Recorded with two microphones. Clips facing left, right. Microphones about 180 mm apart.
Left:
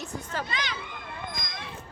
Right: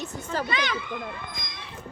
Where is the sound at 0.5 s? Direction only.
55° right (ahead or behind).